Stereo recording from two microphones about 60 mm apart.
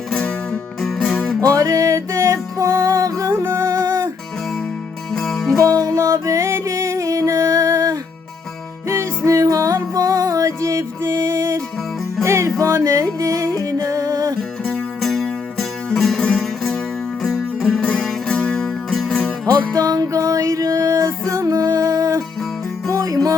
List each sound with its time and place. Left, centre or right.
0.1 s music: centre
1.4 s music: right
5.1 s music: centre
5.5 s music: right
8.9 s music: right
15.0 s music: centre
19.7 s music: right
21.4 s music: right
22.9 s music: right